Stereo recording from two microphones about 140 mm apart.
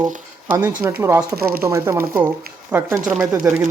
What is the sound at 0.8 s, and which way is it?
Speech, 20° right (ahead or behind).